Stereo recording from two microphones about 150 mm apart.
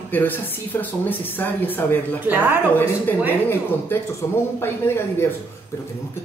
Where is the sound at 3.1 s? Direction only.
10° left (ahead or behind).